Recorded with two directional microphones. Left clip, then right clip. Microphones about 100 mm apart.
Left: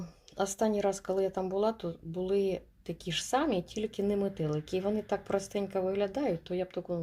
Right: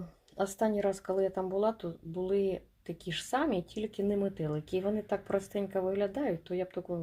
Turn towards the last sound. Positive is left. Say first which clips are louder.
# left 1 dB
turn(degrees=10)  # may be behind; listen again after turning